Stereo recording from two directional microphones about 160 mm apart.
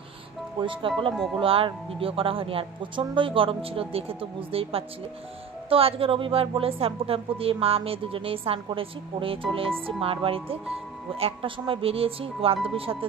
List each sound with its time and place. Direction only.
0.6 s a woman's voice: 30° right (ahead or behind)
1.1 s speech: 5° right (ahead or behind)
1.4 s a woman's voice: 35° right (ahead or behind)